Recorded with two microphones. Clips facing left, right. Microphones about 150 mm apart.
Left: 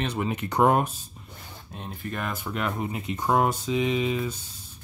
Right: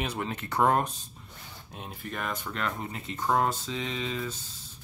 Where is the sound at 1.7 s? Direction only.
Centre (ahead or behind); by 4.3 s 15° left (ahead or behind).